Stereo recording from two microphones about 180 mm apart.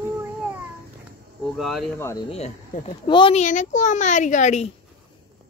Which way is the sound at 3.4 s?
45° left (ahead or behind).